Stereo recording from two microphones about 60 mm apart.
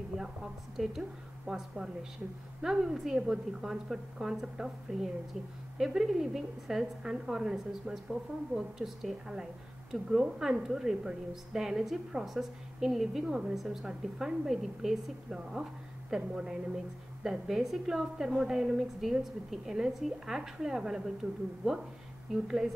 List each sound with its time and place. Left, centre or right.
0.2 s a woman's voice: centre